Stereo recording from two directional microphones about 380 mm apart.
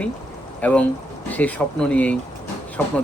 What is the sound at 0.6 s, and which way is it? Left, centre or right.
Speech, centre.